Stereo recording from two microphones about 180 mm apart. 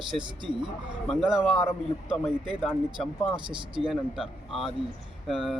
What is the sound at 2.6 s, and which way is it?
Speech, 5° left (ahead or behind).